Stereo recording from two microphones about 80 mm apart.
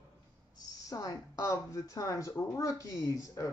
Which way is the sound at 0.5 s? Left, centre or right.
Left.